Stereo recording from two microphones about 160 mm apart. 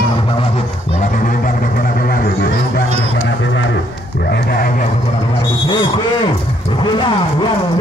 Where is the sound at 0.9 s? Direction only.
55° left (ahead or behind).